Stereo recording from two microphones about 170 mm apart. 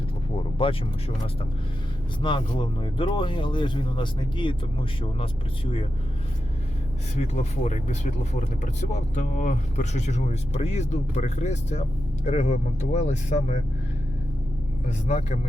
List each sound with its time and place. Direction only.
0.6 s speech: 35° left (ahead or behind)
7.2 s speech: 40° left (ahead or behind)
14.8 s speech: 45° left (ahead or behind)